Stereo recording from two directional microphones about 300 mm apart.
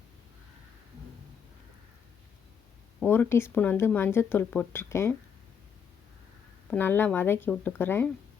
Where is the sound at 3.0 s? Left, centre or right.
Centre.